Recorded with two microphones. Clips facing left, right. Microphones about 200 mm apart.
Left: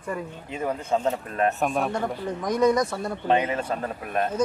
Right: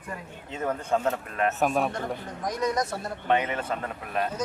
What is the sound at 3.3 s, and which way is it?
Speech, 30° left (ahead or behind).